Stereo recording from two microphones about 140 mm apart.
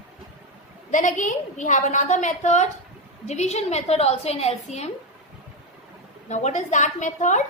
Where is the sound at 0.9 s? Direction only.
60° left (ahead or behind).